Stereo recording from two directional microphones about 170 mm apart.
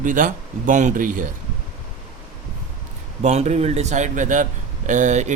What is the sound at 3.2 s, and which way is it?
Speech, 40° right (ahead or behind).